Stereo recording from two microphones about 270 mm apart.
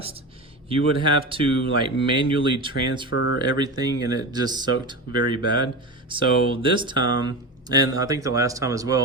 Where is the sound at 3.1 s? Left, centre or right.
Left.